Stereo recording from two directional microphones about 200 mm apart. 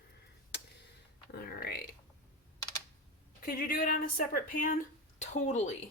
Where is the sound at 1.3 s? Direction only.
50° left (ahead or behind).